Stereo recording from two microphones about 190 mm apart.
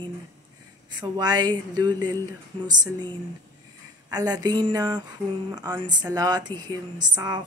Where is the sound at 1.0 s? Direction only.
20° right (ahead or behind).